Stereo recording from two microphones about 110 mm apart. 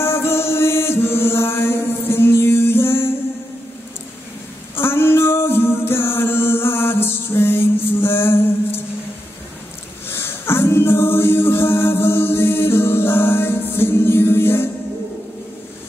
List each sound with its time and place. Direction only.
0.0 s music: 25° left (ahead or behind)
4.7 s music: 20° left (ahead or behind)
10.0 s a capella: 20° left (ahead or behind)